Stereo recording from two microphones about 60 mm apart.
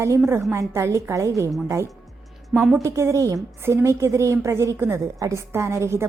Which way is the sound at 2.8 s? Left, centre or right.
Right.